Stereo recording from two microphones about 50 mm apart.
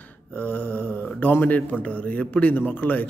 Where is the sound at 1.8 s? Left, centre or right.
Left.